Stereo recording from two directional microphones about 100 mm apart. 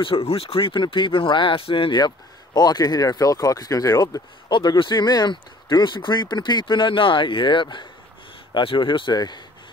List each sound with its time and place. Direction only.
0.0 s speech: 70° left (ahead or behind); by 4.2 s 35° left (ahead or behind)
4.5 s speech: 55° left (ahead or behind)